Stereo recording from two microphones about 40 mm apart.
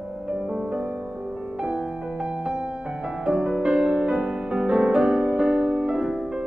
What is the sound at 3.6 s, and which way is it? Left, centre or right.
Music, centre.